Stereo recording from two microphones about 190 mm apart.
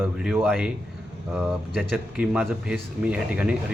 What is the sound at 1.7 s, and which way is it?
Speech, 5° right (ahead or behind).